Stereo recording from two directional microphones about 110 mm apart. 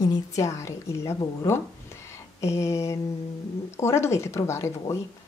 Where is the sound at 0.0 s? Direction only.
30° left (ahead or behind).